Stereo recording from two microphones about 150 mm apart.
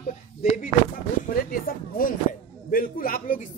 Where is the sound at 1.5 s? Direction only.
75° left (ahead or behind).